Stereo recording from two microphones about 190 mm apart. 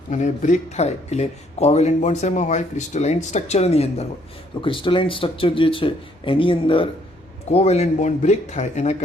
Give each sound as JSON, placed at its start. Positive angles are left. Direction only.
{"t": 0.1, "sound": "speech", "side_deg": 40}